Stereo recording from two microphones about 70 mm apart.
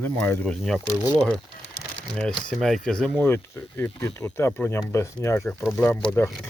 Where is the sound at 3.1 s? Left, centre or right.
Left.